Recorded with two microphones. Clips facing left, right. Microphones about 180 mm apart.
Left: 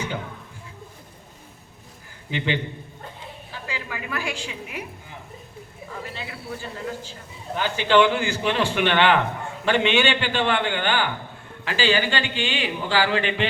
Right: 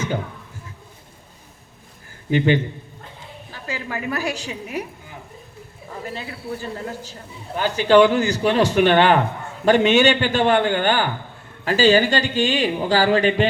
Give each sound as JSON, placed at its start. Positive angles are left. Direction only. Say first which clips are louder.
{"t": 2.3, "sound": "a man's voice", "louder": "right 8 dB", "side_deg": -45}
{"t": 3.7, "sound": "speech", "louder": "right 6 dB", "side_deg": -45}
{"t": 6.1, "sound": "a man's voice", "louder": "right 4 dB", "side_deg": -40}